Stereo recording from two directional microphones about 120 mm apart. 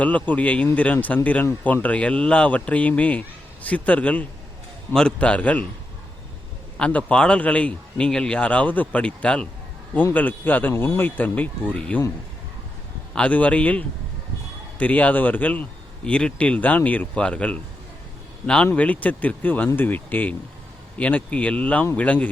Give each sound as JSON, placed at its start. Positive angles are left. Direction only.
{"t": 0.0, "sound": "speech", "side_deg": 10}
{"t": 6.7, "sound": "speech", "side_deg": 10}
{"t": 13.1, "sound": "speech", "side_deg": 10}